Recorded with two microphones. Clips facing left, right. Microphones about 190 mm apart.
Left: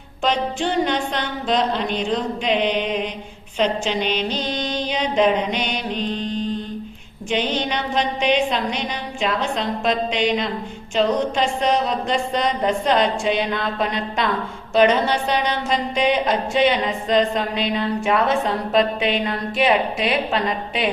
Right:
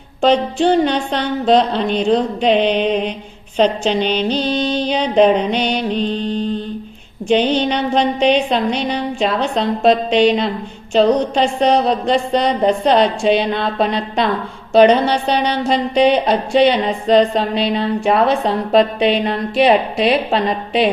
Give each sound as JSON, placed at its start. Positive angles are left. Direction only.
{"t": 0.2, "sound": "speech", "side_deg": -35}